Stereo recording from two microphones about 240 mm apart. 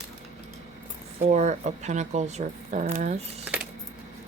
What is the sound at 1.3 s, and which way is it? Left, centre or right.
Speech, right.